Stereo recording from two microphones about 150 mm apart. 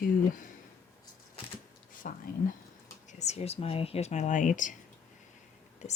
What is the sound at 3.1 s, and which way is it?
Speech, 50° left (ahead or behind).